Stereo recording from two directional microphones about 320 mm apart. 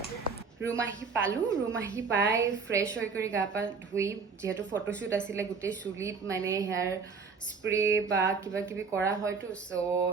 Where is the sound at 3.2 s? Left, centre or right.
Centre.